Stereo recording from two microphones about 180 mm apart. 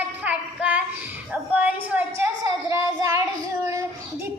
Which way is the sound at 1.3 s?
5° right (ahead or behind).